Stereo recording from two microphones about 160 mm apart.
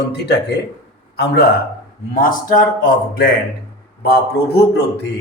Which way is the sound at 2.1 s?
60° left (ahead or behind).